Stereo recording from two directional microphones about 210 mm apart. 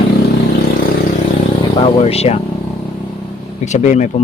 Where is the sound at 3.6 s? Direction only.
35° left (ahead or behind).